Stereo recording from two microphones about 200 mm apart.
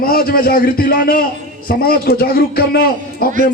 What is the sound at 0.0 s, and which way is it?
A man's voice, 50° left (ahead or behind).